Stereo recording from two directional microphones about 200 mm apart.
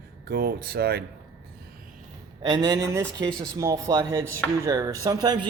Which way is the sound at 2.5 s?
20° right (ahead or behind).